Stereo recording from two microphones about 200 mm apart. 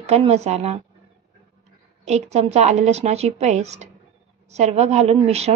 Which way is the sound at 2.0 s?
35° right (ahead or behind).